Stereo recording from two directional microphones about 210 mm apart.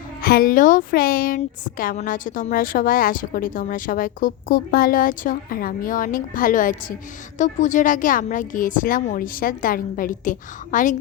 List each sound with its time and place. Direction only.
0.2 s a woman's voice: 45° left (ahead or behind)